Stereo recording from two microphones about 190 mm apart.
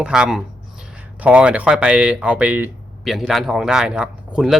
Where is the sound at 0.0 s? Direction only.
5° right (ahead or behind).